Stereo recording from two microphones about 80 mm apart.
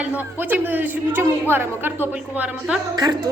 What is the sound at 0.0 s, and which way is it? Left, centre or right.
A woman's voice, right.